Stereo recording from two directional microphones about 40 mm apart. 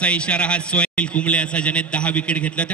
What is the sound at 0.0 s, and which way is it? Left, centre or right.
A man's voice, left.